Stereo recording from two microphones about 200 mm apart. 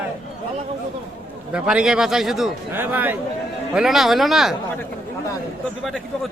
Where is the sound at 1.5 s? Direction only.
5° right (ahead or behind).